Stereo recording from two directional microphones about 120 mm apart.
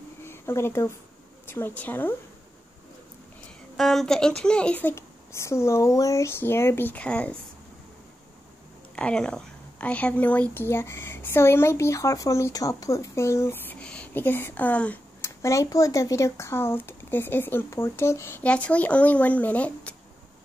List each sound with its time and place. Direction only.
0.2 s a sound: 20° left (ahead or behind)
1.8 s speech: 15° left (ahead or behind)
3.7 s speech: centre (ahead or behind)
8.9 s speech: 5° left (ahead or behind)
15.4 s speech: 25° left (ahead or behind); by 20.0 s 10° left (ahead or behind)